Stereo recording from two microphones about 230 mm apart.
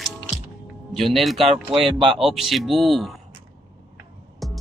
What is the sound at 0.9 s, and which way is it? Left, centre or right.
Speech, centre.